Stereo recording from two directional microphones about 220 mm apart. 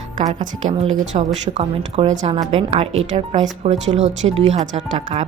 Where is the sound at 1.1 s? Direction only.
30° right (ahead or behind).